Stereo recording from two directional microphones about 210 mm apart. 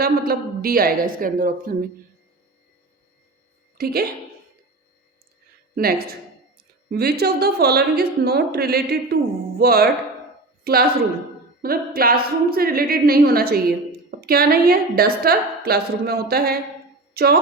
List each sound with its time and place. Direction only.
0.0 s a woman's voice: 45° right (ahead or behind)
3.8 s a woman's voice: 45° right (ahead or behind)
5.7 s a woman's voice: 45° right (ahead or behind)